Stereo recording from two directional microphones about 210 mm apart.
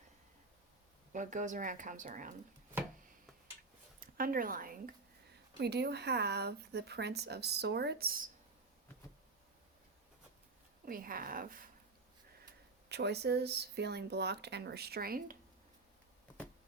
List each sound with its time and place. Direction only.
1.1 s speech: 35° right (ahead or behind)
2.7 s chopping: 10° right (ahead or behind)
4.0 s speech: 40° right (ahead or behind)
10.8 s speech: 40° right (ahead or behind)
12.9 s speech: 50° right (ahead or behind)